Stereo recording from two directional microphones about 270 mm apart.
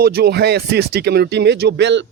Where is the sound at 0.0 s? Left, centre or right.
Right.